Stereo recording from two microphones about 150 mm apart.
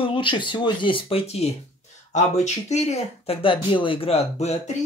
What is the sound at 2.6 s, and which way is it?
Speech, 50° left (ahead or behind).